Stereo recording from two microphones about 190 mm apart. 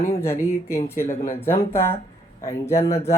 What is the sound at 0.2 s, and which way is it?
Speech, 15° left (ahead or behind).